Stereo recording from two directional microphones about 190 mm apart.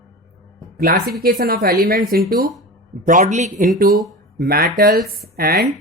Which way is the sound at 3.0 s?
40° right (ahead or behind).